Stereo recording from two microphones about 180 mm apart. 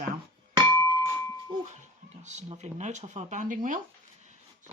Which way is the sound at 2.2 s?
40° right (ahead or behind).